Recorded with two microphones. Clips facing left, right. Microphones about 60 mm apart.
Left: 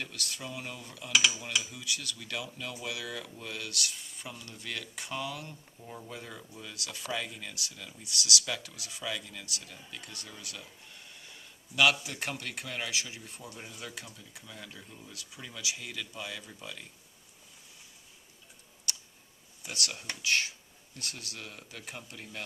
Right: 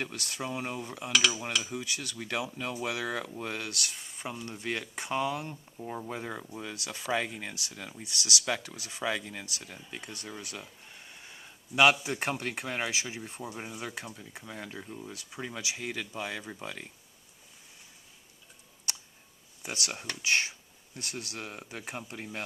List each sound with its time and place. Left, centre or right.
0.0 s speech: right
20.2 s speech: centre